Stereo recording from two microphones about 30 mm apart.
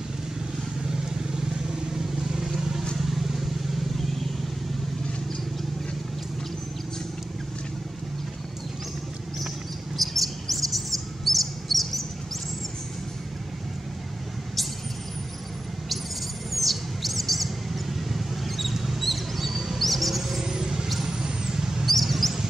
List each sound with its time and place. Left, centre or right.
0.8 s vehicle: centre
3.0 s vehicle: centre
9.9 s bird: centre
16.5 s bird: centre
17.9 s vehicle: centre
19.8 s music: centre
20.4 s music: centre
21.1 s vehicle: right
21.8 s mouse: centre